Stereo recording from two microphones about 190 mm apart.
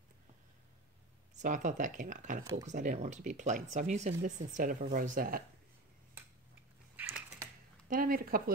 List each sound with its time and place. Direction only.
1.3 s speech: 40° right (ahead or behind)
7.0 s a sound: 10° right (ahead or behind)
7.9 s speech: 50° right (ahead or behind)